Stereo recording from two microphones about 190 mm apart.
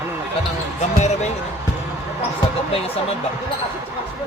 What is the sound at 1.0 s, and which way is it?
Speech, 35° left (ahead or behind).